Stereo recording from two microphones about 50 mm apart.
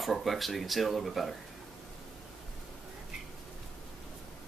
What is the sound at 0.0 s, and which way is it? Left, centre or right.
Speech, centre.